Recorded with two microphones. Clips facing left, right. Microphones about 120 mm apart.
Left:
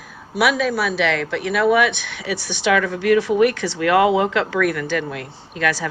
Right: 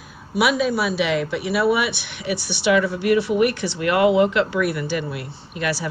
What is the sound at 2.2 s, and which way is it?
Speech, 90° left.